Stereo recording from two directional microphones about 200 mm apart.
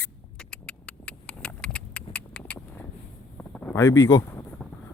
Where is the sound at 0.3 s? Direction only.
5° left (ahead or behind).